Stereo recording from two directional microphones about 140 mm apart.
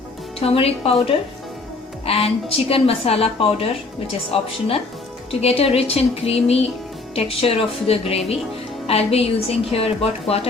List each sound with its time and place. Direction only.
0.3 s a woman's voice: 45° left (ahead or behind)